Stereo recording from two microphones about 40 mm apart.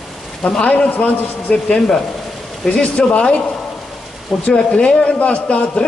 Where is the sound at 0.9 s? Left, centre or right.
Left.